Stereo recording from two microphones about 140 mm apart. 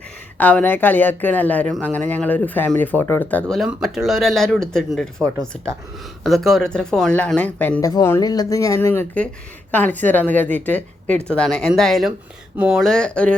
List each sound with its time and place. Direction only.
0.3 s speech: 10° left (ahead or behind)
3.7 s speech: centre (ahead or behind)
7.8 s speech: 25° left (ahead or behind); by 13.3 s 5° left (ahead or behind)